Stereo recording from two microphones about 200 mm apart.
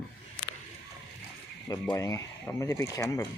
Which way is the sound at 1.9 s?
15° left (ahead or behind).